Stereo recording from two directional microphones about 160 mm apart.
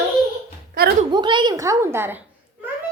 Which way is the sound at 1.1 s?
30° right (ahead or behind).